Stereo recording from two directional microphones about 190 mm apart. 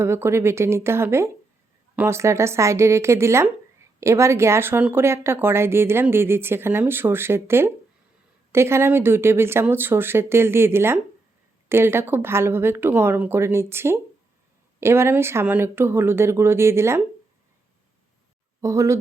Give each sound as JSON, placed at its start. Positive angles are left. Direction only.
{"t": 0.0, "sound": "speech", "side_deg": -15}
{"t": 18.6, "sound": "speech", "side_deg": -15}